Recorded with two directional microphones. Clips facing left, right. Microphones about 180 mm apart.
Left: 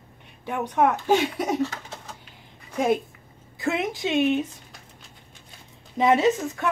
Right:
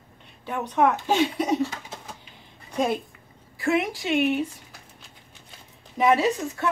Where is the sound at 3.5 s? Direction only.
20° left (ahead or behind).